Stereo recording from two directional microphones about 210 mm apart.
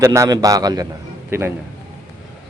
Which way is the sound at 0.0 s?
15° right (ahead or behind).